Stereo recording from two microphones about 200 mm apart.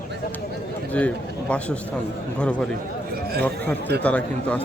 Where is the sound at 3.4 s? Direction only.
10° left (ahead or behind).